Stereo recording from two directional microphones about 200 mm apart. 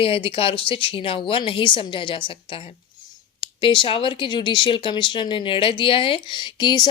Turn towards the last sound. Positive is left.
turn(degrees=20)  # may be behind; listen again after turning